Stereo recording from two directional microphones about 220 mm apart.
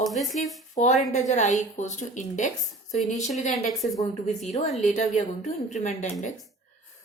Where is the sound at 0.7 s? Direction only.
35° left (ahead or behind).